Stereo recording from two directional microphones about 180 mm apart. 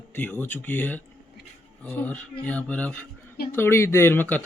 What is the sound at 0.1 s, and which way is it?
Speech, 10° left (ahead or behind).